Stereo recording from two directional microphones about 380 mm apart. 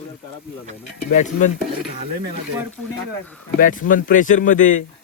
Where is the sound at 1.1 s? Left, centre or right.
Centre.